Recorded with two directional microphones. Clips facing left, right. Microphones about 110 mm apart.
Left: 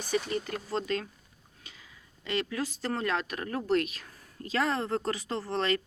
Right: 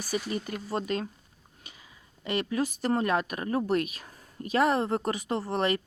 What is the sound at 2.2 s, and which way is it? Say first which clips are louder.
Speech: right 3 dB; 15° right (ahead or behind).